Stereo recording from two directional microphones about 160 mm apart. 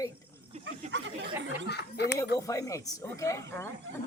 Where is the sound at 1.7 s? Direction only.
90° left.